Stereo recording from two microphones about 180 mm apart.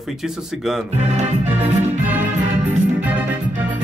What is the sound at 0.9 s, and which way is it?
Music, 40° right (ahead or behind).